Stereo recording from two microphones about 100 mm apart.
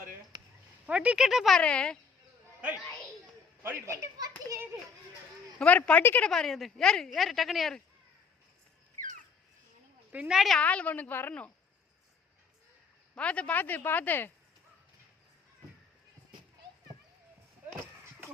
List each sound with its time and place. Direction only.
0.9 s speech: 10° right (ahead or behind)
1.5 s speech: 10° left (ahead or behind)
2.6 s a child's voice: 15° right (ahead or behind)
3.6 s speech: 25° right (ahead or behind)
5.5 s speech: 15° left (ahead or behind)
6.2 s a woman's voice: 5° left (ahead or behind)
10.1 s speech: 10° right (ahead or behind)
10.6 s speech: 15° left (ahead or behind)
13.1 s speech: 10° left (ahead or behind)